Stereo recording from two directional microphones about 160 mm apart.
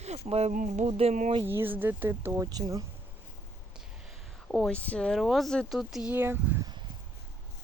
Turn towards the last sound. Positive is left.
turn(degrees=-15)  # may be behind; listen again after turning